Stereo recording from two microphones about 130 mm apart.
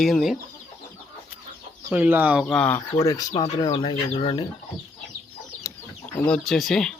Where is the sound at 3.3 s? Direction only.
40° left (ahead or behind).